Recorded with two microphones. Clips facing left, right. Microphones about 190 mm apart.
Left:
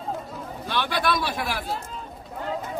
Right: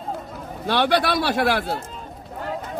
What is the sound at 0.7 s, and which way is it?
Speech, 75° right (ahead or behind).